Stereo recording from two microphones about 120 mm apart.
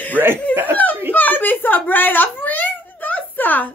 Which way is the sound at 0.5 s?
20° right (ahead or behind).